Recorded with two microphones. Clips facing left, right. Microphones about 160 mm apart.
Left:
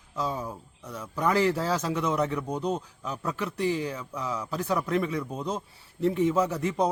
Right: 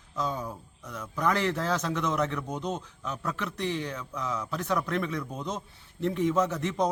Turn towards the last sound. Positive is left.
turn(degrees=10)  # may be behind; listen again after turning